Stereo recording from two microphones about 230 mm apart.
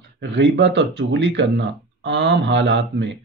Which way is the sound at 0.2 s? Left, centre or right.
Right.